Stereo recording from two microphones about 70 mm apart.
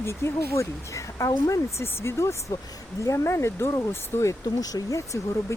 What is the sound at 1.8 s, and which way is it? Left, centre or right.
Speech, left.